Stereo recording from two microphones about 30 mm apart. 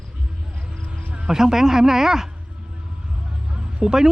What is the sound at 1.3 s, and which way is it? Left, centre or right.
Speech, centre.